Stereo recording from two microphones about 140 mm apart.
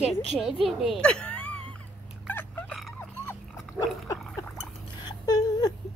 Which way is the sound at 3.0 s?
15° left (ahead or behind).